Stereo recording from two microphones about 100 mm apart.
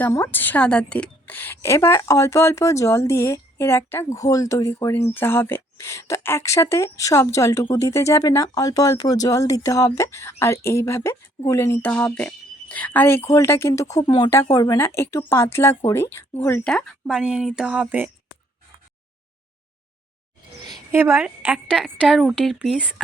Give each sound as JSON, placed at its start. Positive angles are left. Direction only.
{"t": 0.1, "sound": "a woman's voice", "side_deg": 20}
{"t": 11.8, "sound": "a woman's voice", "side_deg": 15}
{"t": 14.0, "sound": "speech", "side_deg": 50}
{"t": 14.5, "sound": "speech", "side_deg": 40}
{"t": 14.8, "sound": "a woman's voice", "side_deg": 25}
{"t": 17.1, "sound": "speech", "side_deg": -5}
{"t": 20.9, "sound": "a woman's voice", "side_deg": -25}
{"t": 21.2, "sound": "speech", "side_deg": -10}